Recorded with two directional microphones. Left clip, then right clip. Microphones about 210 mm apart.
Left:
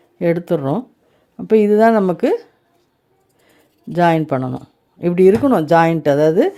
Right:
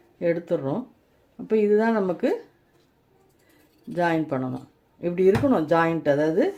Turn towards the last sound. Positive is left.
turn(degrees=50)  # may be behind; listen again after turning